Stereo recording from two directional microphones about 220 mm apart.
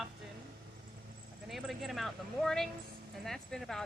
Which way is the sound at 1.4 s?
Centre (ahead or behind).